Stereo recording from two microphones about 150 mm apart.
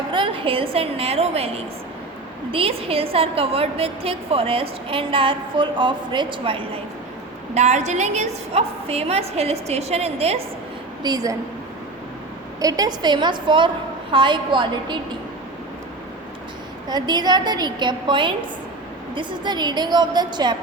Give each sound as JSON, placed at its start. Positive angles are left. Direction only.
{"t": 0.1, "sound": "a woman's voice", "side_deg": -35}
{"t": 7.5, "sound": "a woman's voice", "side_deg": -50}
{"t": 11.0, "sound": "a woman's voice", "side_deg": -25}
{"t": 12.5, "sound": "a woman's voice", "side_deg": -25}
{"t": 16.9, "sound": "a woman's voice", "side_deg": -30}